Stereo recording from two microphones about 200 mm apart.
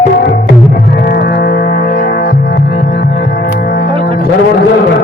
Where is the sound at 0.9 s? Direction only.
50° left (ahead or behind).